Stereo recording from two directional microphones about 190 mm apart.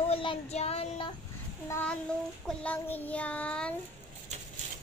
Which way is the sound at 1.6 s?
10° left (ahead or behind).